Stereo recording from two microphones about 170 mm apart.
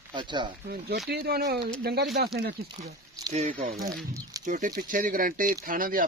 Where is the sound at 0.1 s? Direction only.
25° right (ahead or behind).